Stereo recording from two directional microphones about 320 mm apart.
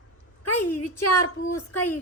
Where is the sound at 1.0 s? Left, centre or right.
Left.